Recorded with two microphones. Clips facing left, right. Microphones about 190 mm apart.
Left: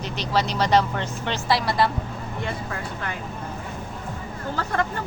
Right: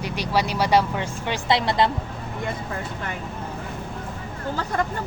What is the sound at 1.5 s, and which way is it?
Speech, 20° right (ahead or behind).